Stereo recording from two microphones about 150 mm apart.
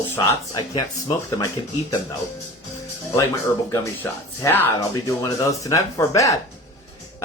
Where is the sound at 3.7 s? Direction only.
20° left (ahead or behind).